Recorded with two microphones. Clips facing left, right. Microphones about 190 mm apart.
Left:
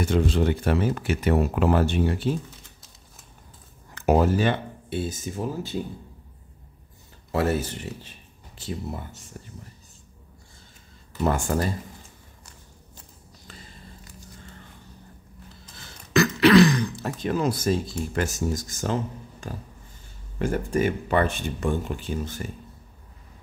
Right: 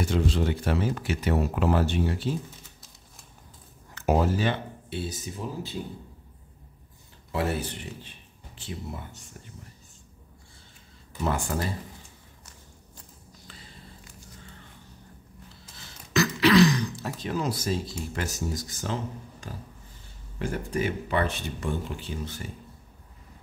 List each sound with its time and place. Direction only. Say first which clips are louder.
0.1 s speech: left 4 dB; 55° left (ahead or behind)
3.9 s speech: left 4 dB; 60° left (ahead or behind)
7.3 s speech: left 4 dB; 45° left (ahead or behind)
11.2 s speech: left 4 dB; 45° left (ahead or behind)
13.5 s a sound: left 4 dB; 45° left (ahead or behind)
16.1 s beatboxing: left 4 dB; 55° left (ahead or behind)
17.2 s speech: left 5 dB; 55° left (ahead or behind)
20.3 s speech: left 5 dB; 50° left (ahead or behind)